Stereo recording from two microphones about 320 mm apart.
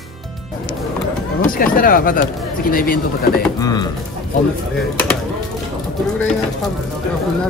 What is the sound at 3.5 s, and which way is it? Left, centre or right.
Speech, centre.